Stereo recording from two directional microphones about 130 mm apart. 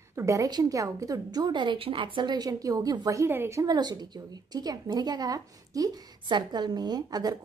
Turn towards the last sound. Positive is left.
turn(degrees=-30)  # may be behind; listen again after turning